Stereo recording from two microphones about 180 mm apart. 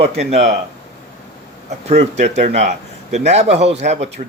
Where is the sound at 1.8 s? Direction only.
40° right (ahead or behind).